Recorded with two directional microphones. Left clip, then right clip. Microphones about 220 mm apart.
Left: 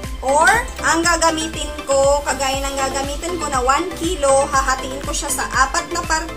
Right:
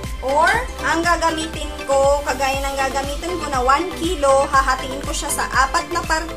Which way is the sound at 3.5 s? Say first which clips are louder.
Right 1 dB; 5° right (ahead or behind).